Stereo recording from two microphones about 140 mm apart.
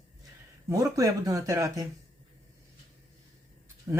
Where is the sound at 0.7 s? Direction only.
25° right (ahead or behind).